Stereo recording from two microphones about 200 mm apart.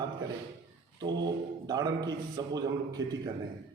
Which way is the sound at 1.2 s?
20° right (ahead or behind).